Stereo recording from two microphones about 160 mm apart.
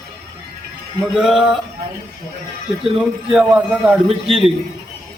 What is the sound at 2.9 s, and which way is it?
Speech, 5° right (ahead or behind).